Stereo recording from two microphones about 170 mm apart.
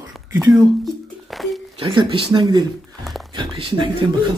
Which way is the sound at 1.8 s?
30° right (ahead or behind).